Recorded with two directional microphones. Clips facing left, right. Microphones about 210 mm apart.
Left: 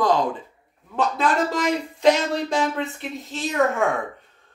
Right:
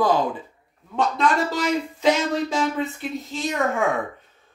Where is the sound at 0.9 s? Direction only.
Centre (ahead or behind).